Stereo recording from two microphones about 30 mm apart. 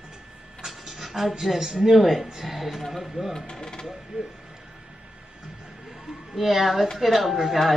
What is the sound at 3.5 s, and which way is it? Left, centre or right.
Speech, centre.